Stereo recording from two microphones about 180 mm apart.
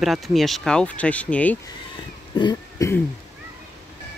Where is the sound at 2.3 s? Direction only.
25° left (ahead or behind).